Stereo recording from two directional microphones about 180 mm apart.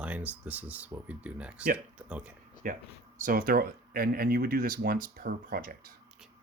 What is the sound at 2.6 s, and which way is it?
Speech, 50° right (ahead or behind).